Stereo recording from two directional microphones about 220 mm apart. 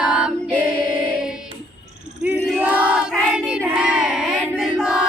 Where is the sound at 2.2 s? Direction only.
5° right (ahead or behind).